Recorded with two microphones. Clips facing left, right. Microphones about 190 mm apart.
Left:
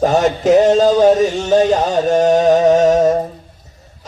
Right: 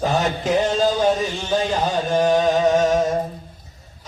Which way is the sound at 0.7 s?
40° left (ahead or behind).